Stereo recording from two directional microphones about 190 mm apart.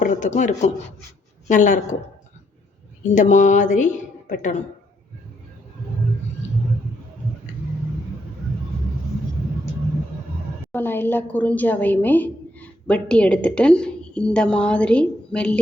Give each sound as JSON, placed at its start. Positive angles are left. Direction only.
{"t": 0.0, "sound": "a woman's voice", "side_deg": 40}
{"t": 3.0, "sound": "a woman's voice", "side_deg": 40}
{"t": 10.7, "sound": "a woman's voice", "side_deg": 10}